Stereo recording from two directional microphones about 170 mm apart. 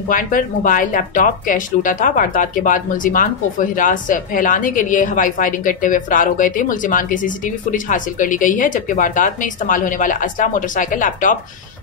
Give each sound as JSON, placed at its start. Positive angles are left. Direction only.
{"t": 0.1, "sound": "speech", "side_deg": 55}